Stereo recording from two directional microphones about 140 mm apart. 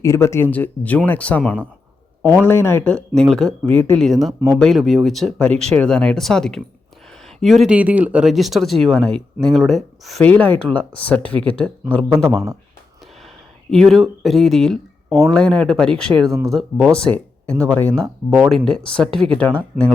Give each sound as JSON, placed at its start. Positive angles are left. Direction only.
{"t": 0.0, "sound": "speech", "side_deg": 20}
{"t": 3.2, "sound": "speech", "side_deg": 5}
{"t": 7.8, "sound": "speech", "side_deg": -10}
{"t": 10.2, "sound": "speech", "side_deg": 10}
{"t": 13.7, "sound": "speech", "side_deg": 5}